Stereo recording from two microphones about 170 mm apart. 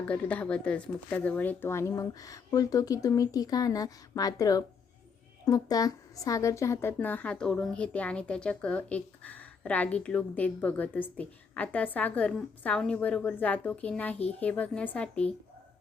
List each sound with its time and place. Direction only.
0.1 s a woman's voice: 5° left (ahead or behind)